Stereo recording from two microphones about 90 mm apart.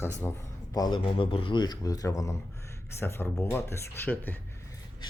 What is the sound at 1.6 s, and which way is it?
Speech, 45° left (ahead or behind).